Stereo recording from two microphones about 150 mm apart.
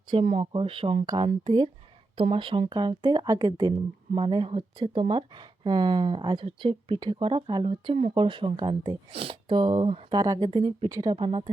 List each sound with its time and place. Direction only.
0.1 s speech: 40° right (ahead or behind)
1.0 s speech: 25° right (ahead or behind)